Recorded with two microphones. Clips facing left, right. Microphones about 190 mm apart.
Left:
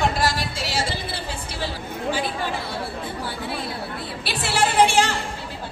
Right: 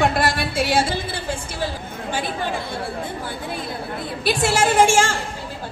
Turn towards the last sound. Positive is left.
turn(degrees=-45)  # may be behind; listen again after turning